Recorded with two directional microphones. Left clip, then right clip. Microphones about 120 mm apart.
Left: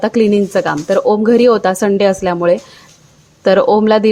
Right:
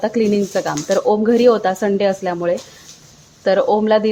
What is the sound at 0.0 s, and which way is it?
A woman's voice, 30° left (ahead or behind).